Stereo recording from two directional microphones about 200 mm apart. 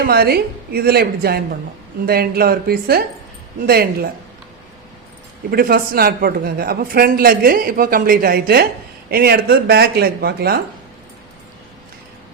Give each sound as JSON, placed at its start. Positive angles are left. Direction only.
{"t": 0.0, "sound": "speech", "side_deg": -50}
{"t": 5.5, "sound": "speech", "side_deg": -50}